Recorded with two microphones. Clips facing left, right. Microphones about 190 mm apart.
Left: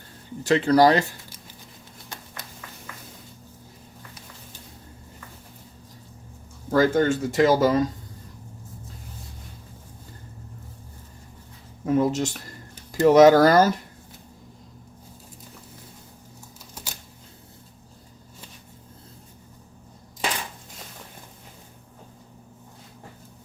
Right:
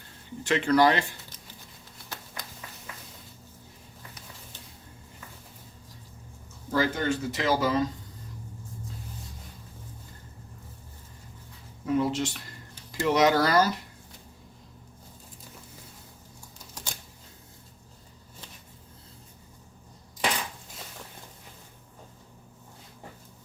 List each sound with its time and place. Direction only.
0.4 s speech: 35° left (ahead or behind)
6.7 s speech: 50° left (ahead or behind)
11.9 s speech: 45° left (ahead or behind)